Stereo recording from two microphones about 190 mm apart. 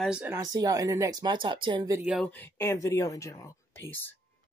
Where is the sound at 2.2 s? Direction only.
10° left (ahead or behind).